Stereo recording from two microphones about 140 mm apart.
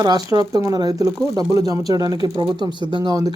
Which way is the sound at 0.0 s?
25° right (ahead or behind).